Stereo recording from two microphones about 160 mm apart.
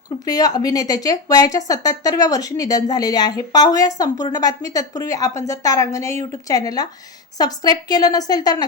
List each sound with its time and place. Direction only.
0.3 s speech: 25° left (ahead or behind)